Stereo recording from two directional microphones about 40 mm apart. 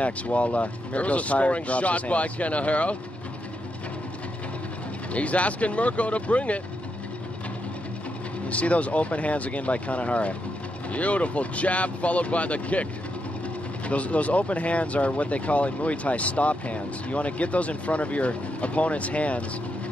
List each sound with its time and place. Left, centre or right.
0.0 s speech: left
5.1 s speech: left
8.5 s speech: left
13.8 s speech: left